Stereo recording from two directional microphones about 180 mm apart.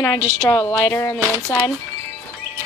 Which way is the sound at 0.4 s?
20° left (ahead or behind).